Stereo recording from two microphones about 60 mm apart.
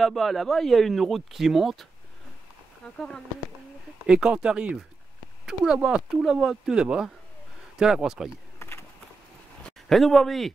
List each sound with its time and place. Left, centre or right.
0.0 s speech: centre
2.8 s speech: centre
4.0 s speech: centre
5.8 s speech: centre
6.0 s speech: centre
8.5 s a sound: left
9.6 s speech: centre